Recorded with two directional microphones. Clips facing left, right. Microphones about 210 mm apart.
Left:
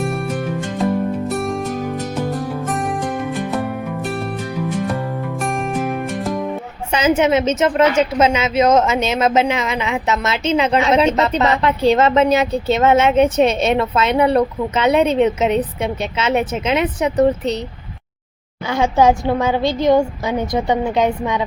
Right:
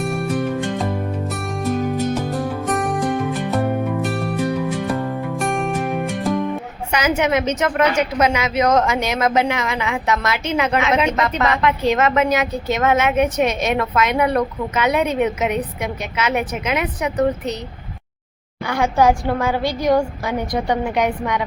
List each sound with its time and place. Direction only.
1.4 s music: centre (ahead or behind)
2.6 s music: centre (ahead or behind)
5.3 s music: centre (ahead or behind)
7.2 s a woman's voice: 25° left (ahead or behind)
18.6 s a woman's voice: 20° left (ahead or behind)